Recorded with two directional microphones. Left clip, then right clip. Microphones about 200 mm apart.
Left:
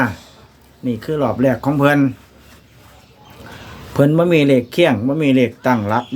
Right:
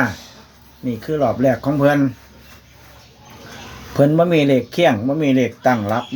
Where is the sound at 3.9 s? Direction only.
15° left (ahead or behind).